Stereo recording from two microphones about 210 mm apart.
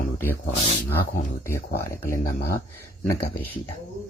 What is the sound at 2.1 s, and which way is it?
Speech, 45° left (ahead or behind).